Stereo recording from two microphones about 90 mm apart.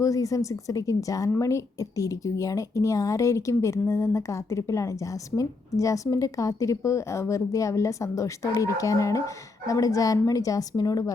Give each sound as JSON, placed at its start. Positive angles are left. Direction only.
{"t": 0.0, "sound": "speech", "side_deg": 40}